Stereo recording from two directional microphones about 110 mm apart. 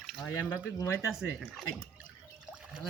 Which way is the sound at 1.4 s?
Centre (ahead or behind).